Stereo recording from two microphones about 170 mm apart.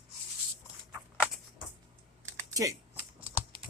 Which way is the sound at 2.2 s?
20° right (ahead or behind).